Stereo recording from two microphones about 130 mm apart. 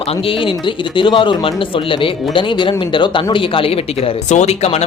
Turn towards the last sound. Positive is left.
turn(degrees=55)  # may be behind; listen again after turning